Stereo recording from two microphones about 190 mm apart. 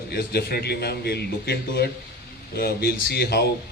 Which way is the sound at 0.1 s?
55° left (ahead or behind).